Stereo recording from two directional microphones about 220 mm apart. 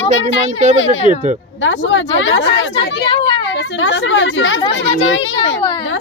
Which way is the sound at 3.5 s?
55° left (ahead or behind).